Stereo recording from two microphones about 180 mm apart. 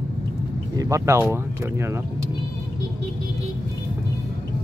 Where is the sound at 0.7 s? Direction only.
15° right (ahead or behind).